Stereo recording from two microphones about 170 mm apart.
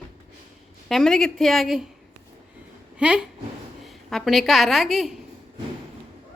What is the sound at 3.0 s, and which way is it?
A woman's voice, 5° right (ahead or behind).